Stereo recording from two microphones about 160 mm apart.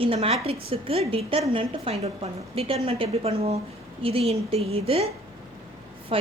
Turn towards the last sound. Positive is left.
turn(degrees=-35)  # may be behind; listen again after turning